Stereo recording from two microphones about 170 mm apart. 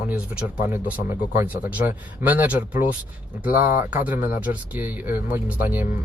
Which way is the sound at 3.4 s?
50° left (ahead or behind).